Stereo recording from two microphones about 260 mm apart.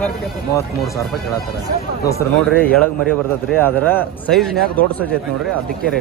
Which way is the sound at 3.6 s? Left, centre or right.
Centre.